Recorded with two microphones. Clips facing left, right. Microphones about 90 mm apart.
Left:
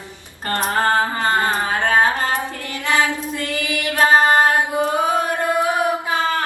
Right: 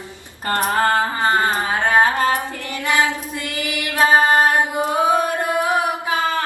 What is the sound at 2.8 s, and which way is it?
Music, 20° right (ahead or behind).